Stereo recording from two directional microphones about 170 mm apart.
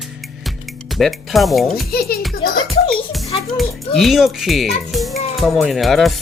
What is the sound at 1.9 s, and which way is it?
Speech, 65° left (ahead or behind).